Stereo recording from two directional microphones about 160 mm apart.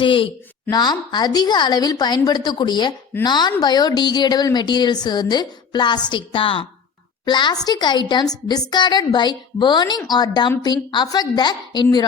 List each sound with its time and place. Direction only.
0.0 s a woman's voice: 35° left (ahead or behind)